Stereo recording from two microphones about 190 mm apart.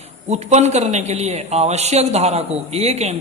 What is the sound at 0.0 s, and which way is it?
A man's voice, 35° right (ahead or behind).